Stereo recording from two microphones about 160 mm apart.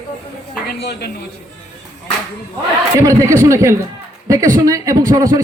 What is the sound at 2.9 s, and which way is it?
A man's voice, 20° right (ahead or behind).